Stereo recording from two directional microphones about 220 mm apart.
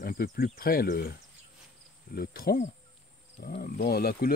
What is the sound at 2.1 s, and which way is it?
Cricket, 45° left (ahead or behind).